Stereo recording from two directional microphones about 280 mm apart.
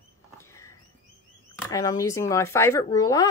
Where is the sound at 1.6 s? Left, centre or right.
Centre.